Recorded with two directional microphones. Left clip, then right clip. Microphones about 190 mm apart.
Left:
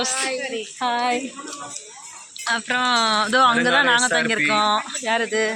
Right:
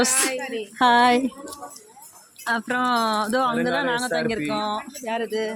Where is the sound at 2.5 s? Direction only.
35° right (ahead or behind).